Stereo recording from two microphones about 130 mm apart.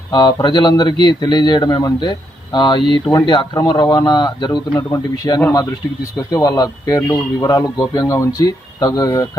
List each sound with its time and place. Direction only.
0.1 s speech: 30° left (ahead or behind)
4.8 s speech: 20° left (ahead or behind)